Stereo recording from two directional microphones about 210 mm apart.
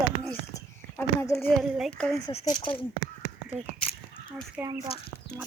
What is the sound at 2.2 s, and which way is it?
Speech, 20° left (ahead or behind).